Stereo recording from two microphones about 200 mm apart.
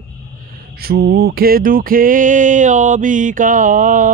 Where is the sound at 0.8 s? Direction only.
50° right (ahead or behind).